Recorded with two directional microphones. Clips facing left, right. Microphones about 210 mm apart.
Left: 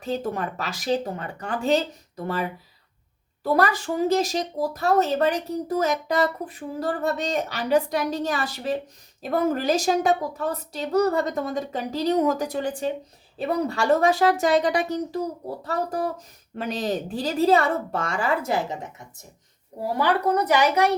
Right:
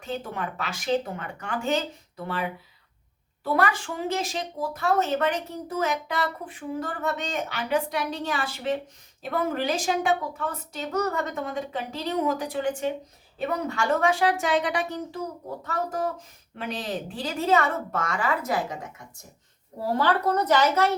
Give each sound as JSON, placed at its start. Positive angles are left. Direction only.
{"t": 0.0, "sound": "speech", "side_deg": 40}
{"t": 20.0, "sound": "a woman's voice", "side_deg": 15}